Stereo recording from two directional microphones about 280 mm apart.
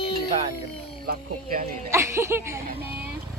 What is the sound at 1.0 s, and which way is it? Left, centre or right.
Speech, right.